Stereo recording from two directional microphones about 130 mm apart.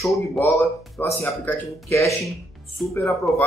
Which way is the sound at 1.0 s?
15° left (ahead or behind).